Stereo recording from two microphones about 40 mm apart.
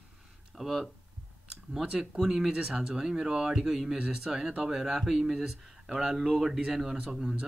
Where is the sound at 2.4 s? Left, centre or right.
Centre.